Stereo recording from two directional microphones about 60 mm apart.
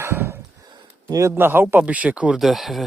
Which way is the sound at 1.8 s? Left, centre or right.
Right.